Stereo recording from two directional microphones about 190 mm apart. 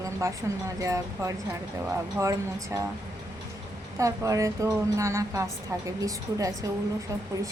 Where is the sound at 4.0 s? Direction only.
15° right (ahead or behind).